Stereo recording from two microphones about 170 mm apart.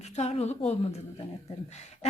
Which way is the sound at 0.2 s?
40° left (ahead or behind).